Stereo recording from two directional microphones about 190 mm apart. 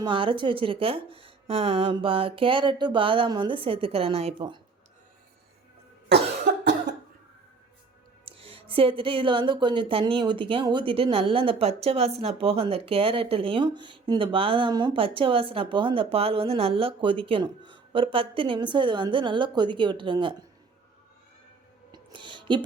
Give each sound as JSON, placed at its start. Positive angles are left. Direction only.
{"t": 0.0, "sound": "speech", "side_deg": -25}
{"t": 8.2, "sound": "speech", "side_deg": -30}
{"t": 21.9, "sound": "music", "side_deg": -25}